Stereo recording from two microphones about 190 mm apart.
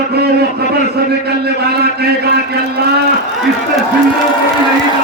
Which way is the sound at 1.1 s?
55° right (ahead or behind).